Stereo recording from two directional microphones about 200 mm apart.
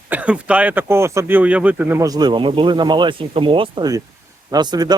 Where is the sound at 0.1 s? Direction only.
5° right (ahead or behind).